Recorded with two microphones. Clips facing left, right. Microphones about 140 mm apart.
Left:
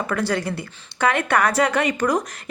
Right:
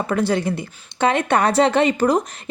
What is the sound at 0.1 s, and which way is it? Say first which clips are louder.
A woman's voice: right 5 dB; 20° right (ahead or behind).